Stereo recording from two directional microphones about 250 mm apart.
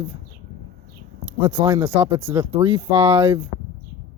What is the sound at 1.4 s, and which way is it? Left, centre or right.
Speech, centre.